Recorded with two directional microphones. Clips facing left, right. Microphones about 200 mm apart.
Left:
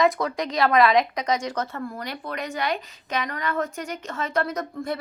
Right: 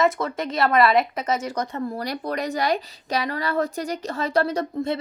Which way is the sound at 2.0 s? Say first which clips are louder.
Right 5 dB; 40° right (ahead or behind).